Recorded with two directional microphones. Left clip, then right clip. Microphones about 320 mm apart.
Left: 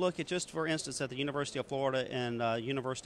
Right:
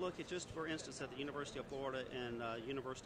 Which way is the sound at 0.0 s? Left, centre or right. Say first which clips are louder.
Left 11 dB; left.